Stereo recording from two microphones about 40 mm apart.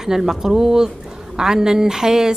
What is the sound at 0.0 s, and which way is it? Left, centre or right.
Speech, centre.